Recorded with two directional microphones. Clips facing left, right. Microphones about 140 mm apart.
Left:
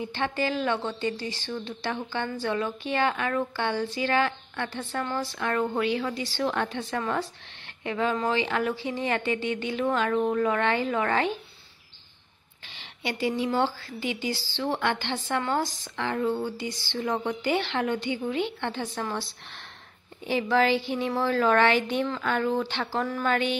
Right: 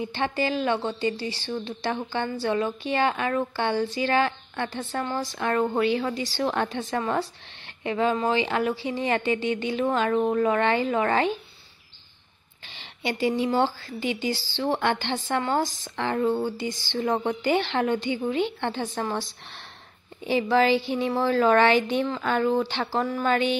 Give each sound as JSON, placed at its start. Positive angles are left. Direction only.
{"t": 0.0, "sound": "a woman's voice", "side_deg": -20}
{"t": 1.5, "sound": "a woman's voice", "side_deg": -25}
{"t": 5.2, "sound": "a woman's voice", "side_deg": -35}
{"t": 6.4, "sound": "a woman's voice", "side_deg": -25}
{"t": 6.7, "sound": "a woman's voice", "side_deg": -40}
{"t": 7.0, "sound": "a woman's voice", "side_deg": -25}
{"t": 12.6, "sound": "a woman's voice", "side_deg": -25}
{"t": 15.3, "sound": "a woman's voice", "side_deg": -35}
{"t": 16.6, "sound": "a woman's voice", "side_deg": -45}
{"t": 20.2, "sound": "a woman's voice", "side_deg": -20}